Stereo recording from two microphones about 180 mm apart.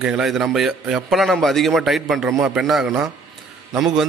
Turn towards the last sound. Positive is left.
turn(degrees=-5)  # may be behind; listen again after turning